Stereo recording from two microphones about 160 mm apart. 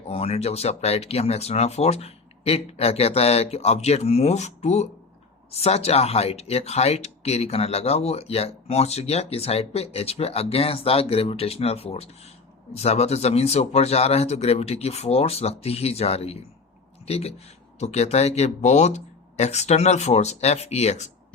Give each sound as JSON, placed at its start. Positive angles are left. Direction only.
{"t": 0.1, "sound": "speech", "side_deg": 40}